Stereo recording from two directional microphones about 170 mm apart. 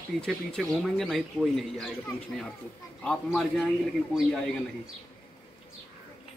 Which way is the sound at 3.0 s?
5° left (ahead or behind).